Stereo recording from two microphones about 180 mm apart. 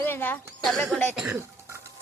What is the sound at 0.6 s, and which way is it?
Speech, centre (ahead or behind).